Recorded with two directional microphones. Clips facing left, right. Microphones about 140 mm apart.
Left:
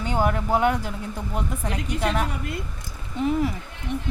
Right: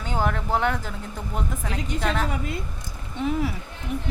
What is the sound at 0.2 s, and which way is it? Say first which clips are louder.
Speech: left 2 dB; 10° left (ahead or behind).